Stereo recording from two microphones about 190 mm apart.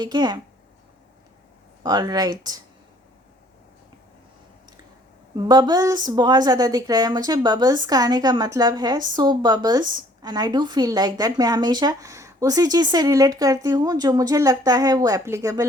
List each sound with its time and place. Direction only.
0.0 s a woman's voice: 20° right (ahead or behind)
1.8 s a woman's voice: 20° right (ahead or behind)
5.4 s a woman's voice: 20° right (ahead or behind)